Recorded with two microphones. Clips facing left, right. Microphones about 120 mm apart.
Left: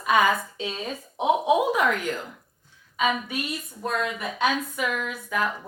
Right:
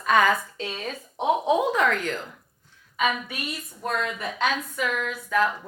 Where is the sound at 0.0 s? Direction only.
15° left (ahead or behind).